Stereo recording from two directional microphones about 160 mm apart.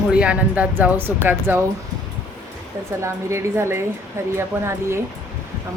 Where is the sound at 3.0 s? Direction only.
15° right (ahead or behind).